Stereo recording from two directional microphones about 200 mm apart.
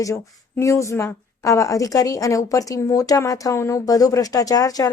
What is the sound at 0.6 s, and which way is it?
Speech, 15° left (ahead or behind).